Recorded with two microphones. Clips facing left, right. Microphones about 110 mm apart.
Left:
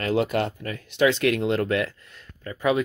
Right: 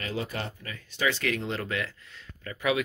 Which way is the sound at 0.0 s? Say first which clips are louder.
Left 10 dB; 70° left (ahead or behind).